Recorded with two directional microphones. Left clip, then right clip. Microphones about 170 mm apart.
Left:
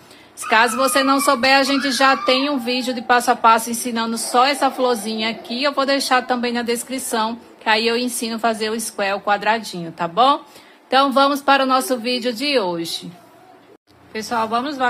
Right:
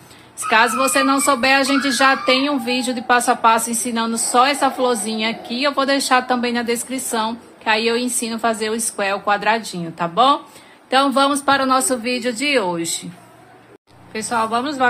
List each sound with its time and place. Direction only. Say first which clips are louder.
0.5 s speech: even; 10° left (ahead or behind)
14.1 s speech: right 1 dB; centre (ahead or behind)